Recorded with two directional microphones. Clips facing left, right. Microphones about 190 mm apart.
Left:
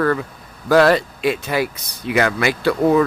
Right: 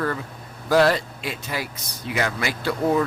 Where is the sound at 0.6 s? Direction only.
65° left (ahead or behind).